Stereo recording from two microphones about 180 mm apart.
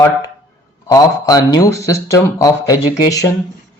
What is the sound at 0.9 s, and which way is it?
Speech, 20° left (ahead or behind).